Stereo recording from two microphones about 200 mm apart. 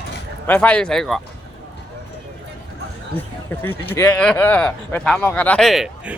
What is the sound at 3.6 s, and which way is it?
Speech, 10° left (ahead or behind).